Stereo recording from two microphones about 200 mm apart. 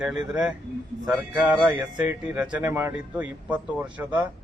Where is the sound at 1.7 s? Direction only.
20° right (ahead or behind).